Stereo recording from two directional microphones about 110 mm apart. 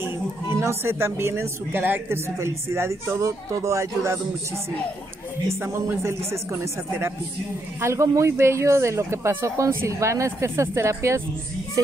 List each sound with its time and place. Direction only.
0.6 s a woman's voice: 25° right (ahead or behind)
5.5 s a woman's voice: 25° right (ahead or behind)